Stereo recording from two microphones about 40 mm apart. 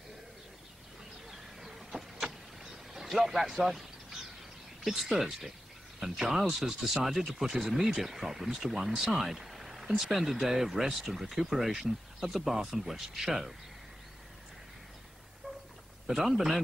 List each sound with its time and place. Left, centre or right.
1.3 s vehicle: centre
4.8 s speech: centre
16.3 s speech: centre